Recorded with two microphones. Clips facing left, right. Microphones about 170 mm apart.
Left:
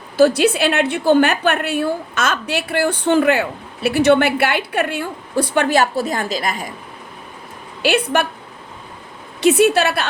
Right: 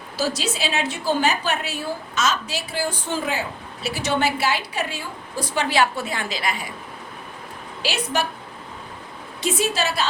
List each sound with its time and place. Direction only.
0.2 s a woman's voice: 60° left (ahead or behind)
7.8 s a woman's voice: 60° left (ahead or behind)
9.4 s a woman's voice: 65° left (ahead or behind)